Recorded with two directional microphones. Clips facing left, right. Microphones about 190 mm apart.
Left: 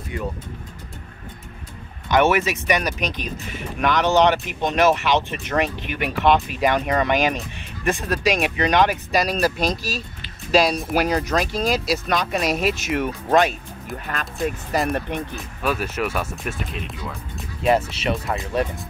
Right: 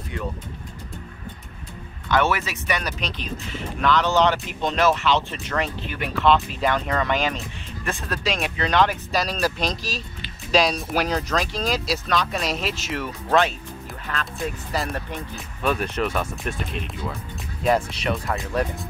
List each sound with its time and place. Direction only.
0.1 s speech: 10° left (ahead or behind)
2.0 s speech: 20° left (ahead or behind)
14.7 s speech: 15° left (ahead or behind)
15.3 s speech: 5° left (ahead or behind)
18.3 s speech: 15° left (ahead or behind)